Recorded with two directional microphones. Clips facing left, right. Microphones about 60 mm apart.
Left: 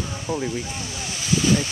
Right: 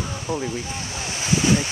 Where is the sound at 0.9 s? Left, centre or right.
Right.